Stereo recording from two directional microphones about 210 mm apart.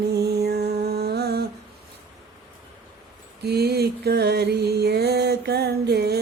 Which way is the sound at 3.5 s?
50° right (ahead or behind).